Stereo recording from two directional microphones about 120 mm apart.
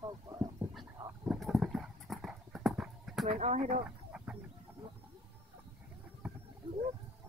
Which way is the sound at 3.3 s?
75° right (ahead or behind).